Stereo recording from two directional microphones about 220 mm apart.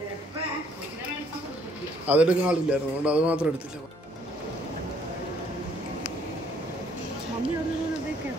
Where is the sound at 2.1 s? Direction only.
5° right (ahead or behind).